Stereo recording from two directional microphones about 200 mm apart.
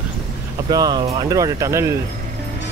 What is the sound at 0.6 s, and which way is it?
Speech, 20° right (ahead or behind).